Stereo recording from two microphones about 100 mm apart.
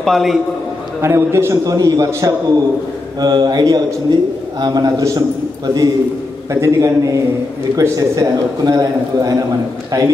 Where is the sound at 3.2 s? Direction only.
45° right (ahead or behind).